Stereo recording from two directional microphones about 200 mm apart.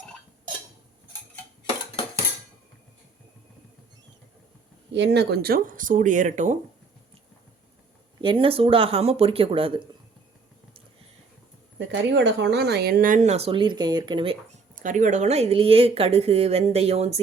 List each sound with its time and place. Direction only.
4.9 s speech: 60° right (ahead or behind); by 6.6 s 35° right (ahead or behind)
8.2 s speech: 25° right (ahead or behind)
11.8 s speech: 65° right (ahead or behind); by 14.3 s 25° right (ahead or behind)
14.8 s speech: 40° right (ahead or behind)